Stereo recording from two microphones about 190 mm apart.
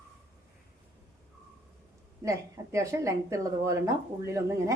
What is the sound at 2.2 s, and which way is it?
Speech, 15° right (ahead or behind).